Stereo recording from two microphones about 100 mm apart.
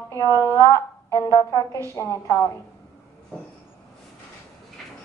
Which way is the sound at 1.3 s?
45° left (ahead or behind).